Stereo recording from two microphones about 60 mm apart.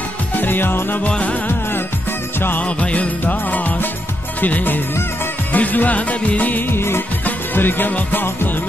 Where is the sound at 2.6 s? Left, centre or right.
Left.